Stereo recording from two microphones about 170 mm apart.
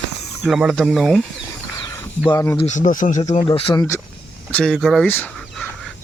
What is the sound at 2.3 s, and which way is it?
Speech, 15° left (ahead or behind).